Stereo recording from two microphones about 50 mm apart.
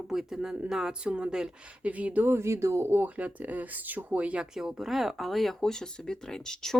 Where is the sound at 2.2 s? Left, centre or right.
Right.